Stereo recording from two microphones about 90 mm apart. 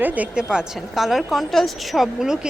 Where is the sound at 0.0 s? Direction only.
15° right (ahead or behind).